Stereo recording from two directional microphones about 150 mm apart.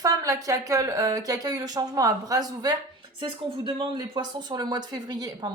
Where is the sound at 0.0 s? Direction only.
20° right (ahead or behind).